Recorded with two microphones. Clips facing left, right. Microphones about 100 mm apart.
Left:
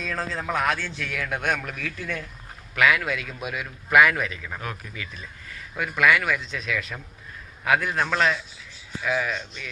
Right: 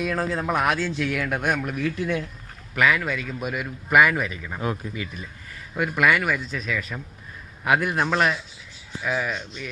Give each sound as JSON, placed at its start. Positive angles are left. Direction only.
{"t": 0.0, "sound": "a man's voice", "side_deg": -15}
{"t": 2.7, "sound": "a man's voice", "side_deg": 0}
{"t": 4.6, "sound": "speech", "side_deg": -25}
{"t": 5.7, "sound": "a man's voice", "side_deg": -10}
{"t": 7.8, "sound": "a man's voice", "side_deg": -10}